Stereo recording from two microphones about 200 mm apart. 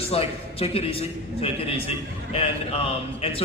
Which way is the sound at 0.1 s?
30° left (ahead or behind).